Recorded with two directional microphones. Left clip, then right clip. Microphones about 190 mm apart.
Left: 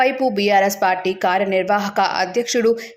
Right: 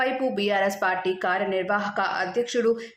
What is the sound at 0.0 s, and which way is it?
Speech, 20° left (ahead or behind).